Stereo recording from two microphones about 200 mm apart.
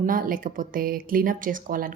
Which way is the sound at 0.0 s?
45° right (ahead or behind).